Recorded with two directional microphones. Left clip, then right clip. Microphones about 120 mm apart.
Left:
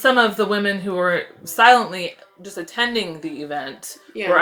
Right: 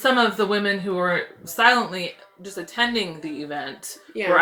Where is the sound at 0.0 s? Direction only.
40° left (ahead or behind).